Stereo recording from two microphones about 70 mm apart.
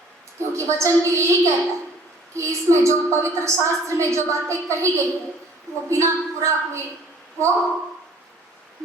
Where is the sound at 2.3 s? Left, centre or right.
Right.